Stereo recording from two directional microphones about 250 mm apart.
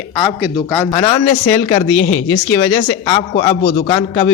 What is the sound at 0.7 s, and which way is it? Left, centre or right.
A man's voice, centre.